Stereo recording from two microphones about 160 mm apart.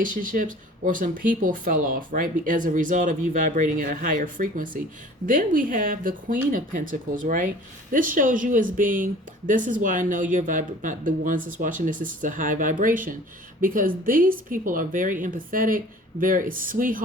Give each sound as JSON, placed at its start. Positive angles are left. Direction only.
{"t": 0.0, "sound": "speech", "side_deg": -55}